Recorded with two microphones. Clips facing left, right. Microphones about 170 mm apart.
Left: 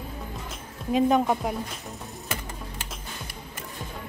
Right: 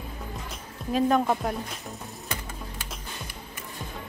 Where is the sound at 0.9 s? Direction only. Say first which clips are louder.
Left 1 dB; 15° left (ahead or behind).